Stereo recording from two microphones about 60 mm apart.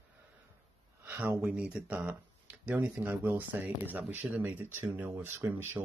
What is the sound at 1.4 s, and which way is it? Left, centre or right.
Speech, centre.